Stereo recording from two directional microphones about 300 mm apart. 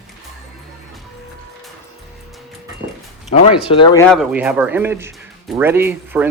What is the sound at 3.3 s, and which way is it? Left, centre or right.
Speech, centre.